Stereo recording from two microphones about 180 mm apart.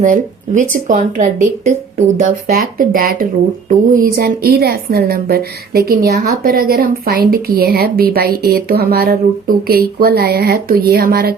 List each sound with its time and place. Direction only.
0.0 s speech: 45° right (ahead or behind)
2.5 s a woman's voice: 55° right (ahead or behind)